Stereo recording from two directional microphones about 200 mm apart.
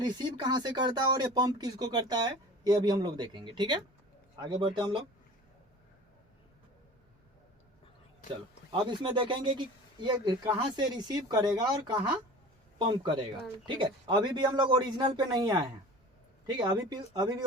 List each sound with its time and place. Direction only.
0.0 s speech: 20° right (ahead or behind)
8.7 s speech: 25° right (ahead or behind)